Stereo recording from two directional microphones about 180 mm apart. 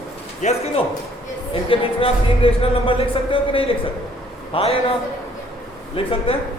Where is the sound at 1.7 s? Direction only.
30° left (ahead or behind).